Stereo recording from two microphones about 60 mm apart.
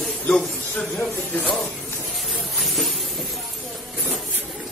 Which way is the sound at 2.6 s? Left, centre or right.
Centre.